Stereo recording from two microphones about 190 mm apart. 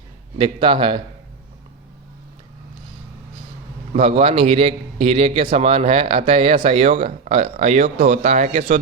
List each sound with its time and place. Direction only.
0.3 s speech: 25° right (ahead or behind)
3.9 s a man's voice: 30° right (ahead or behind)